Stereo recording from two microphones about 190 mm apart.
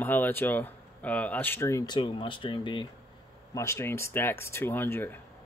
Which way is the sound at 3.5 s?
15° left (ahead or behind).